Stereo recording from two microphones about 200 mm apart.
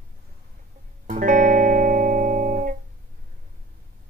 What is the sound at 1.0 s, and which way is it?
Music, 40° right (ahead or behind).